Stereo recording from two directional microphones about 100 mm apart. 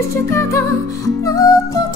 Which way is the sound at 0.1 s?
30° left (ahead or behind).